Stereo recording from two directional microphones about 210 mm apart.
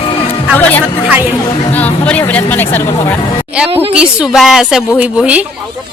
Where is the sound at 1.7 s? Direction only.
10° left (ahead or behind).